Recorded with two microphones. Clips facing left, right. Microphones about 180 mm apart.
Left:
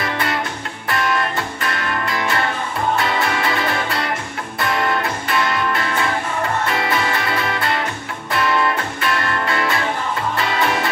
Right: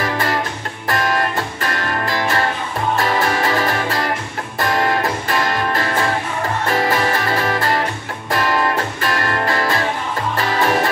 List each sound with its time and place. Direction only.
0.0 s music: 40° right (ahead or behind)